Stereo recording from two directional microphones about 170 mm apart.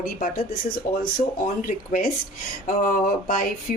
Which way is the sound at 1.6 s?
55° left (ahead or behind).